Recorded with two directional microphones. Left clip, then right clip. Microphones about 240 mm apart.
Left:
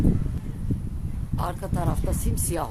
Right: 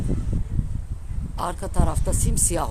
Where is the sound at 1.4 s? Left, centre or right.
Right.